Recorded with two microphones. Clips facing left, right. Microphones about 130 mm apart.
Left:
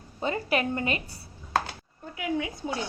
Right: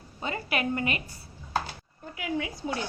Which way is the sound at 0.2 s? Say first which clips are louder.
Left 4 dB; 35° left (ahead or behind).